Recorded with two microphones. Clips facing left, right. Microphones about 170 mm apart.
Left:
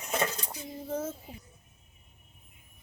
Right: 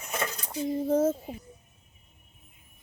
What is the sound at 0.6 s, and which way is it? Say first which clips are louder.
Speech: right 12 dB; 45° right (ahead or behind).